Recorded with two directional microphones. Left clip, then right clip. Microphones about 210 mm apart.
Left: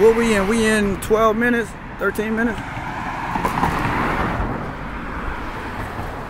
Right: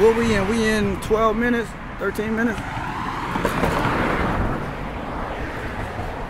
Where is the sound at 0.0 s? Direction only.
15° left (ahead or behind).